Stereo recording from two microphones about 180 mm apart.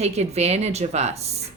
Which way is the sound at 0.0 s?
35° right (ahead or behind).